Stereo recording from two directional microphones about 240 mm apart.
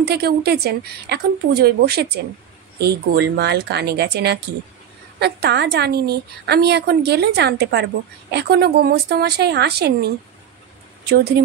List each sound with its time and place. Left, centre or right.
0.0 s a woman's voice: right
11.4 s a woman's voice: right